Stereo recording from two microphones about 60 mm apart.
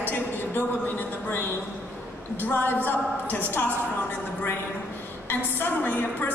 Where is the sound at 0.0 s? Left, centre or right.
Left.